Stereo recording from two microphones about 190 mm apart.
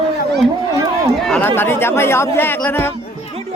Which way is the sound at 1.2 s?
5° left (ahead or behind).